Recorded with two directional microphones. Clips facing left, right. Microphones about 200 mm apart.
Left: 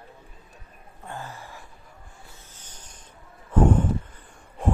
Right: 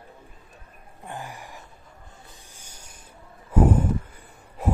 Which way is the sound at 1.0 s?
15° right (ahead or behind).